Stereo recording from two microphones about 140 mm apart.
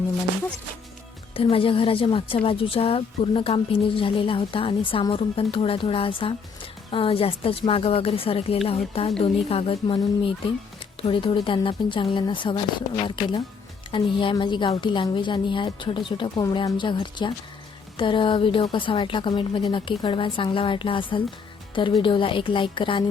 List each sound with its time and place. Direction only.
1.3 s a woman's voice: 40° left (ahead or behind)